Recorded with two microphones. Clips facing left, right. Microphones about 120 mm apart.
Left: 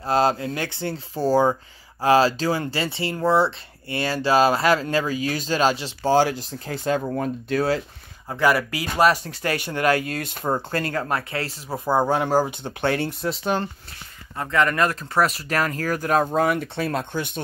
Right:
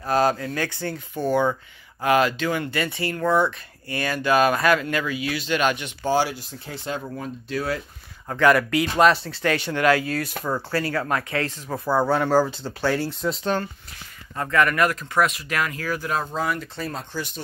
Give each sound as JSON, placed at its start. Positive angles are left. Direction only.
{"t": 0.0, "sound": "speech", "side_deg": 25}
{"t": 1.1, "sound": "speech", "side_deg": 35}
{"t": 6.6, "sound": "speech", "side_deg": 45}
{"t": 8.3, "sound": "speech", "side_deg": 5}
{"t": 9.8, "sound": "speech", "side_deg": 40}
{"t": 10.2, "sound": "speech", "side_deg": 25}
{"t": 11.7, "sound": "speech", "side_deg": 15}
{"t": 12.8, "sound": "speech", "side_deg": 65}
{"t": 13.2, "sound": "speech", "side_deg": 5}
{"t": 14.3, "sound": "speech", "side_deg": 15}